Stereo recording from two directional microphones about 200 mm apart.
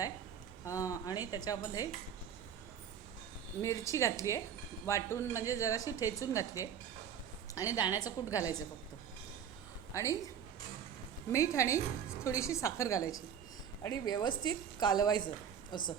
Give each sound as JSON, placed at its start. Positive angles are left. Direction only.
{"t": 0.6, "sound": "a woman's voice", "side_deg": 15}
{"t": 3.6, "sound": "a woman's voice", "side_deg": 15}
{"t": 9.9, "sound": "a woman's voice", "side_deg": 15}
{"t": 11.3, "sound": "a woman's voice", "side_deg": 15}